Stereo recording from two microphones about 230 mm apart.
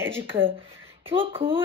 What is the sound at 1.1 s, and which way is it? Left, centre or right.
Speech, right.